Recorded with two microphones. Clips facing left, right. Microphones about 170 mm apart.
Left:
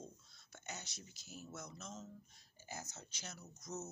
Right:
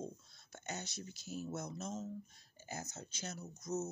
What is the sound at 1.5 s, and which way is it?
Speech, 50° right (ahead or behind).